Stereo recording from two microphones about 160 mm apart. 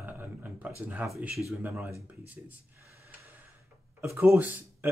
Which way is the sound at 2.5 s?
15° right (ahead or behind).